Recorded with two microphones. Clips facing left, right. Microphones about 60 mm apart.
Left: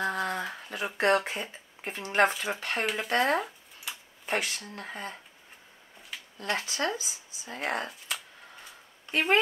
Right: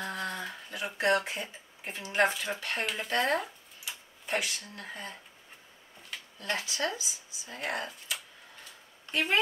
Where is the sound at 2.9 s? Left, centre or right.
Left.